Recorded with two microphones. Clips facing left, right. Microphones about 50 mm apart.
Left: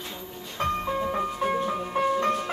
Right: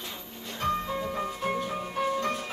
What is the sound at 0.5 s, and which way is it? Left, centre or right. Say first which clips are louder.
Music: left 2 dB; left.